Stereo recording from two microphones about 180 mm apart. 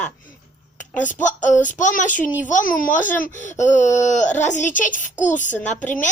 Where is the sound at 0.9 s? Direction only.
45° left (ahead or behind).